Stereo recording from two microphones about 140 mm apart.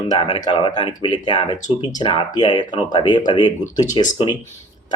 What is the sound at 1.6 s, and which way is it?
Speech, 65° left (ahead or behind).